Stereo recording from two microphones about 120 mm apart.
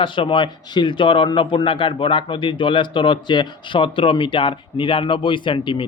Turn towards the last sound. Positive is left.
turn(degrees=45)  # may be behind; listen again after turning